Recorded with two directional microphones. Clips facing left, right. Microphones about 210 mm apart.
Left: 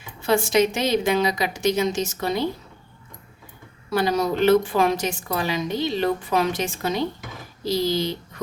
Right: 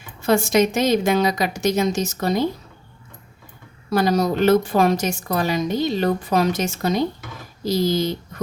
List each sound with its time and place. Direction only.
0.2 s a woman's voice: 45° right (ahead or behind)
3.8 s a woman's voice: 40° right (ahead or behind)